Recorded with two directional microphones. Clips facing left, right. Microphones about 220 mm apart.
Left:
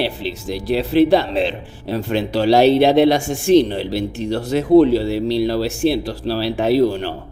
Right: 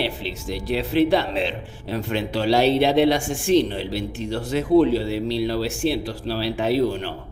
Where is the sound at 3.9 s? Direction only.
40° left (ahead or behind).